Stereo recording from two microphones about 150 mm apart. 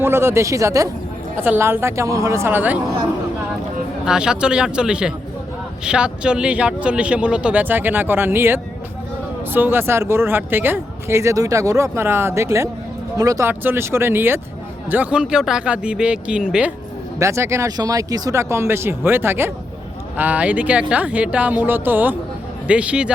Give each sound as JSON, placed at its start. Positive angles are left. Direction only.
{"t": 0.0, "sound": "speech", "side_deg": -15}
{"t": 4.0, "sound": "speech", "side_deg": -5}
{"t": 17.2, "sound": "speech", "side_deg": -20}